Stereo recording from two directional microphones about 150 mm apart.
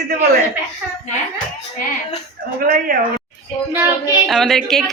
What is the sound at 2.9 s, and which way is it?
Speech, 75° right (ahead or behind).